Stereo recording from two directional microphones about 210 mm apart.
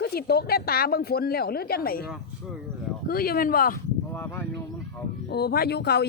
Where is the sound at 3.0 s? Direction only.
45° left (ahead or behind).